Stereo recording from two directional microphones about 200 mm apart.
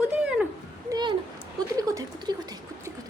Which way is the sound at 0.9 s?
15° right (ahead or behind).